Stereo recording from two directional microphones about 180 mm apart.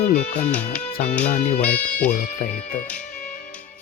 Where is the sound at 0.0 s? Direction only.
40° left (ahead or behind).